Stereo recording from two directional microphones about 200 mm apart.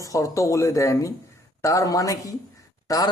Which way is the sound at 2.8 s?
15° left (ahead or behind).